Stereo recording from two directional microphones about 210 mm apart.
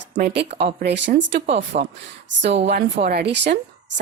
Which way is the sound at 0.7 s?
55° right (ahead or behind).